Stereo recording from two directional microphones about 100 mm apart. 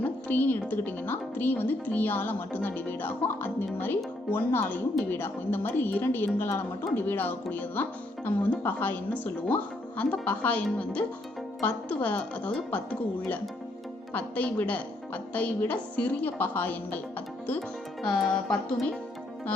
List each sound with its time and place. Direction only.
0.0 s music: 20° left (ahead or behind)
0.7 s a woman's voice: 20° left (ahead or behind)
12.0 s a woman's voice: 15° left (ahead or behind)
18.0 s speech: 5° left (ahead or behind)